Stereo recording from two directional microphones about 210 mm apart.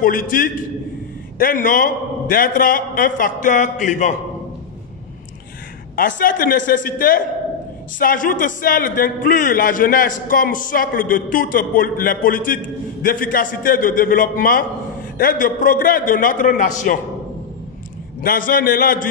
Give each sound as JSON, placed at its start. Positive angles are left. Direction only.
{"t": 0.0, "sound": "a man's voice", "side_deg": 40}
{"t": 5.9, "sound": "a man's voice", "side_deg": 40}
{"t": 18.2, "sound": "a man's voice", "side_deg": 45}